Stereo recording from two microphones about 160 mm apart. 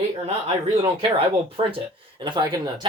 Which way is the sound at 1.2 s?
35° right (ahead or behind).